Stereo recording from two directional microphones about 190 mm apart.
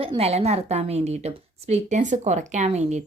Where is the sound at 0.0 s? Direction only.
30° right (ahead or behind).